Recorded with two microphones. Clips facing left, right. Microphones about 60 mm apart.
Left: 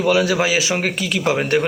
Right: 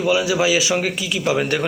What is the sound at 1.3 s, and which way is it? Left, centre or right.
Speech, left.